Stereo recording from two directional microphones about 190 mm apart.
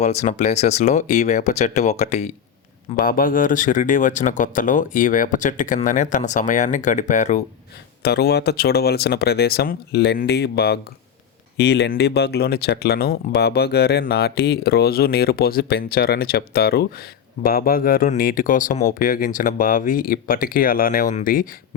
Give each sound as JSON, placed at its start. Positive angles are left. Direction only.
{"t": 0.0, "sound": "speech", "side_deg": 35}
{"t": 2.9, "sound": "speech", "side_deg": 50}
{"t": 8.0, "sound": "speech", "side_deg": 60}